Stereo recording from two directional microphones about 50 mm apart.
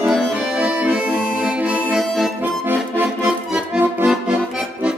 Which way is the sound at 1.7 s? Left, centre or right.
Centre.